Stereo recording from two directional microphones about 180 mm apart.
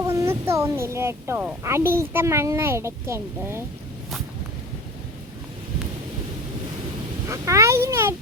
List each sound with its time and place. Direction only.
0.0 s speech: 15° right (ahead or behind)
7.3 s speech: 15° right (ahead or behind)